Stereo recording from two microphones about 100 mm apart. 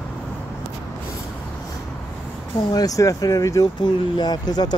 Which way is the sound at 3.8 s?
45° left (ahead or behind).